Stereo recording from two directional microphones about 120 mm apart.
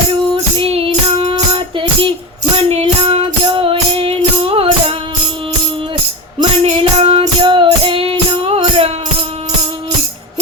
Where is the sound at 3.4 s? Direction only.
45° right (ahead or behind).